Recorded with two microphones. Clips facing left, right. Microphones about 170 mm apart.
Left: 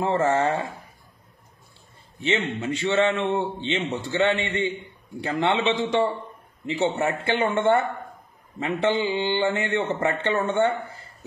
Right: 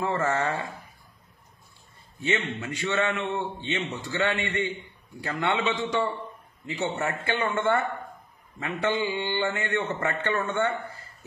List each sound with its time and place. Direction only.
0.0 s a man's voice: 25° left (ahead or behind)
2.1 s a man's voice: 25° left (ahead or behind)